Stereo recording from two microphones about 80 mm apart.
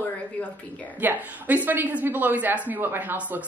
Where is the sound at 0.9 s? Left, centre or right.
Right.